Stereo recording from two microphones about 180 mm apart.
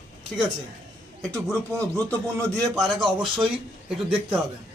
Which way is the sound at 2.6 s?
20° right (ahead or behind).